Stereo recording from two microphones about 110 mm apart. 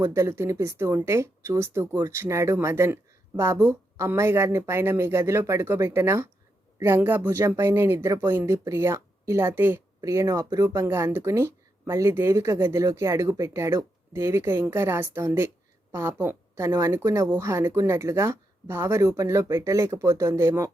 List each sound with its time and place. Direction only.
0.0 s speech: 25° right (ahead or behind)
10.0 s speech: 30° right (ahead or behind)